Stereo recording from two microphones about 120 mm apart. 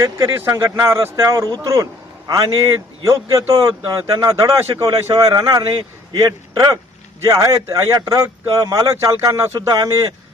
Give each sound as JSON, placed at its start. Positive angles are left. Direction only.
{"t": 0.0, "sound": "speech", "side_deg": -25}